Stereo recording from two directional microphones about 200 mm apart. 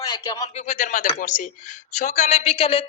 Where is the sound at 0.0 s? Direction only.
20° left (ahead or behind).